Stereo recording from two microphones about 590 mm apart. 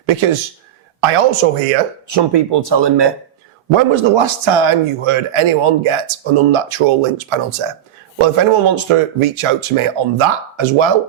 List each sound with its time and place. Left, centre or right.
0.0 s a man's voice: right
2.0 s speech: right